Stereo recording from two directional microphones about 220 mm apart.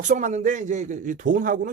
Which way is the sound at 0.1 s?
35° right (ahead or behind).